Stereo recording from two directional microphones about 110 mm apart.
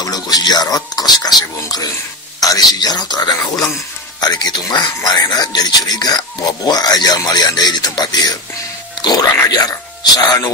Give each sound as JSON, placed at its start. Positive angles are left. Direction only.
{"t": 0.0, "sound": "speech", "side_deg": 35}